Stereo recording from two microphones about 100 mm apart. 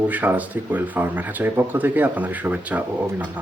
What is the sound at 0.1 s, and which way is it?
Speech, 15° right (ahead or behind).